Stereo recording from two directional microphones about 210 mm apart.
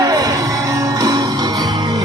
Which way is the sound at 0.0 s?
15° right (ahead or behind).